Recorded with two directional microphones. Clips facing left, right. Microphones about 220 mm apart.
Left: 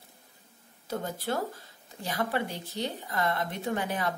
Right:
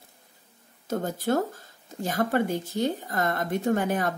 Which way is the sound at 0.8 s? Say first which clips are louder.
Right 6 dB; 45° right (ahead or behind).